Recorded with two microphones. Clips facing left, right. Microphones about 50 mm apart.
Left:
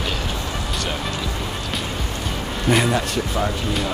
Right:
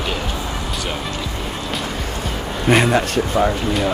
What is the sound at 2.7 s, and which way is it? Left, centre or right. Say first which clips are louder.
Speech: right 4 dB; right.